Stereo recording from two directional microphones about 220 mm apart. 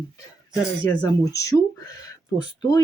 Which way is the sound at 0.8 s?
15° left (ahead or behind).